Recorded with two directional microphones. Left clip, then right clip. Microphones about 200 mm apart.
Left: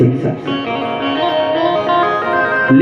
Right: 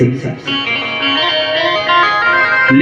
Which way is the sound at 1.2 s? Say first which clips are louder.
Left 3 dB; 50° left (ahead or behind).